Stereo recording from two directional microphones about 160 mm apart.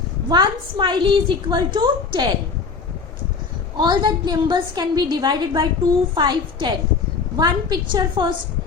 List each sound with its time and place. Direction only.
0.3 s a woman's voice: 30° right (ahead or behind)
3.8 s a woman's voice: 25° right (ahead or behind)